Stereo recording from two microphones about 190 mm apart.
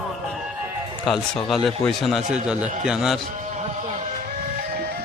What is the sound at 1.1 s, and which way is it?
A man's voice, centre (ahead or behind).